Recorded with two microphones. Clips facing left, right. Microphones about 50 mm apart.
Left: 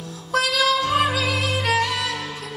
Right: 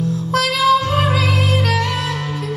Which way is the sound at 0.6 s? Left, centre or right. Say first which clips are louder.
Right 5 dB; right.